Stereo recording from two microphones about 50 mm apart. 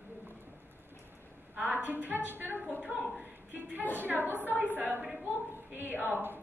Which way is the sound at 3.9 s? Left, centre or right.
Right.